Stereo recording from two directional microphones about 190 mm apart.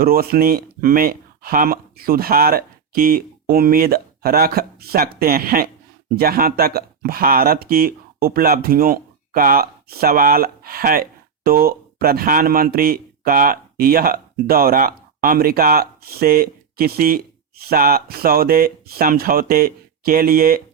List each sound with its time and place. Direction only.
0.0 s speech: 50° right (ahead or behind)